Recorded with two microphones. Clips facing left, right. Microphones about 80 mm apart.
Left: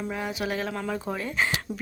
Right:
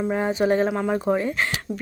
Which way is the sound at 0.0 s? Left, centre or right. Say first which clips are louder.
Right 9 dB; right.